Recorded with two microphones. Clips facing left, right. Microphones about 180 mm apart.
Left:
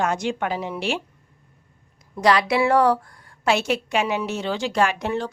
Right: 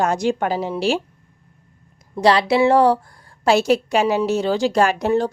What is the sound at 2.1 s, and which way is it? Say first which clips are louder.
Speech: right 3 dB; 30° right (ahead or behind).